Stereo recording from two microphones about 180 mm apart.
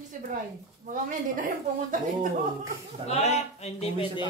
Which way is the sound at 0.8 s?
50° right (ahead or behind).